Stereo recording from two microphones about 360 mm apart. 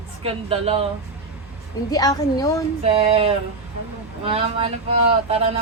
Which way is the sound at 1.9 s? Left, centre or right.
Centre.